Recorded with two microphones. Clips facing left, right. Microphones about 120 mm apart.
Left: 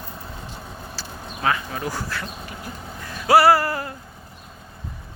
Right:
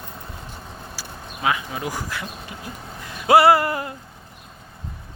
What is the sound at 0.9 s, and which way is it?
Speech, 10° right (ahead or behind).